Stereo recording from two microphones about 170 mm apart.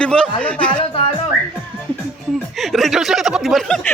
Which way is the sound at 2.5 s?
Centre (ahead or behind).